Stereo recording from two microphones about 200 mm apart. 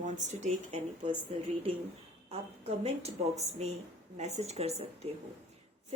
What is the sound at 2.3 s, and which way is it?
Speech, 30° right (ahead or behind).